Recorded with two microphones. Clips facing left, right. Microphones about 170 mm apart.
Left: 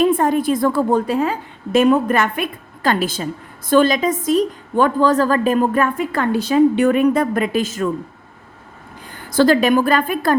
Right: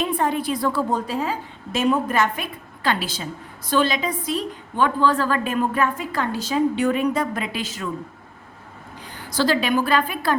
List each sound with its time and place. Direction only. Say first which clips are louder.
0.0 s a woman's voice: left 7 dB; 45° left (ahead or behind)
9.0 s a woman's voice: left 7 dB; 50° left (ahead or behind)